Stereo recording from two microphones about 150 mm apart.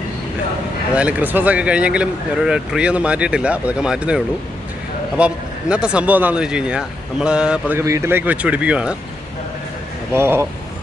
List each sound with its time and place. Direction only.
0.9 s speech: 10° right (ahead or behind)
10.1 s speech: 15° right (ahead or behind)